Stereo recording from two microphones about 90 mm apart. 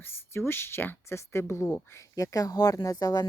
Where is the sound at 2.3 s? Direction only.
40° left (ahead or behind).